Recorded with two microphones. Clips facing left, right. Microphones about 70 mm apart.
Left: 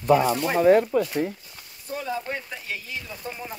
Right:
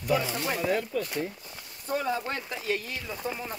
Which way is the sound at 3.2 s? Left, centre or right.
Centre.